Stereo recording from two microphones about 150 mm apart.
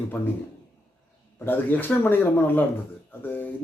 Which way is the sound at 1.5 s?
10° left (ahead or behind).